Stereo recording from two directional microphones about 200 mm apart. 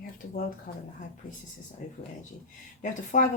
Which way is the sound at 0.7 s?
45° left (ahead or behind).